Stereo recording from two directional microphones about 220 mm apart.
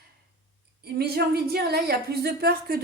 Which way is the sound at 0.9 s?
45° right (ahead or behind).